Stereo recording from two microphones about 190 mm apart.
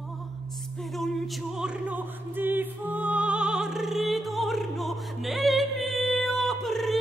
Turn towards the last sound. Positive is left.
turn(degrees=0)  # may be behind; listen again after turning